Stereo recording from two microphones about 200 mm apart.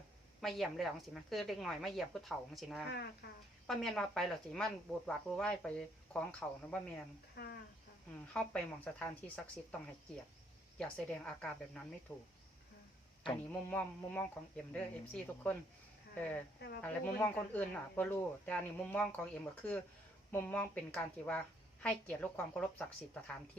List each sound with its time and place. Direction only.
0.4 s a woman's voice: centre (ahead or behind)
2.9 s speech: 55° left (ahead or behind)
3.7 s a woman's voice: centre (ahead or behind)
7.3 s speech: 55° left (ahead or behind)
8.3 s speech: 5° left (ahead or behind)
10.8 s a woman's voice: 5° left (ahead or behind)
13.5 s speech: 5° left (ahead or behind)
16.6 s speech: 55° left (ahead or behind)
16.8 s a woman's voice: 5° left (ahead or behind)